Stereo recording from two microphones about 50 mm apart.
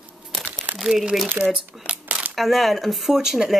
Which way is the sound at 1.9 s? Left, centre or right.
Right.